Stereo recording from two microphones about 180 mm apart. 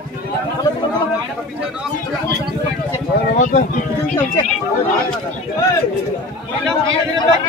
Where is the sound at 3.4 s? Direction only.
45° left (ahead or behind).